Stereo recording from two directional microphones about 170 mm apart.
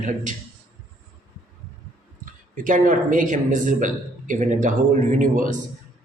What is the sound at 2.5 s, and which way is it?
A man's voice, 50° right (ahead or behind).